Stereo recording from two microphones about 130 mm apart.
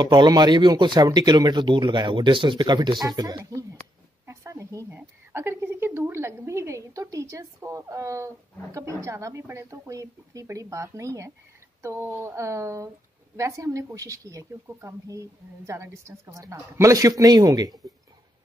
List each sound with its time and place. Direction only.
0.0 s a woman's voice: 35° right (ahead or behind)
4.3 s a sound: 20° right (ahead or behind)
8.7 s a woman's voice: 25° right (ahead or behind)